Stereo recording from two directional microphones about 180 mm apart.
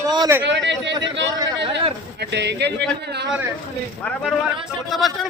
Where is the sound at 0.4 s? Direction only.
80° right.